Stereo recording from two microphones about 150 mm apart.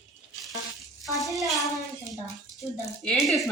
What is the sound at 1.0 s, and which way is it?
Rattle, centre (ahead or behind).